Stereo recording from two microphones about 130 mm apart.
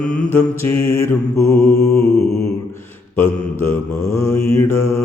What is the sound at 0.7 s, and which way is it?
Mantra, 20° left (ahead or behind).